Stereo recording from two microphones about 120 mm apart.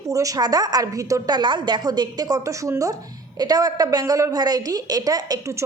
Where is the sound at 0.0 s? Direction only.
30° right (ahead or behind).